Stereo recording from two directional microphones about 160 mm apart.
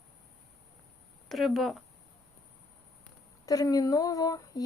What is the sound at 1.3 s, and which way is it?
Speech, centre (ahead or behind).